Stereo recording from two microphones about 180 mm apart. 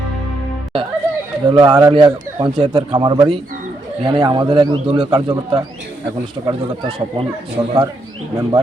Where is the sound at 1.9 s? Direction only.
30° right (ahead or behind).